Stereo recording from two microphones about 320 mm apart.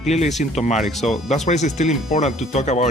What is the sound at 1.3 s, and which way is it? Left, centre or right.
Speech, left.